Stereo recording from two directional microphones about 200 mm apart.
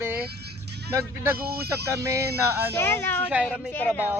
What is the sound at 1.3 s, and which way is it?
Speech, 50° right (ahead or behind).